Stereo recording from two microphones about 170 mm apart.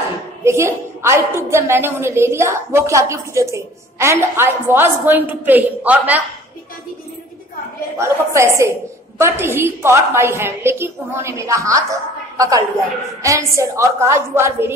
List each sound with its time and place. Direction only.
0.4 s a woman's voice: 15° right (ahead or behind)
8.0 s a woman's voice: 15° right (ahead or behind)